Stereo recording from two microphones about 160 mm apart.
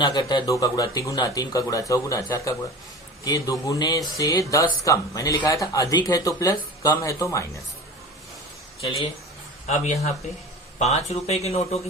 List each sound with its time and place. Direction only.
0.0 s speech: 25° left (ahead or behind)
9.6 s speech: 40° left (ahead or behind)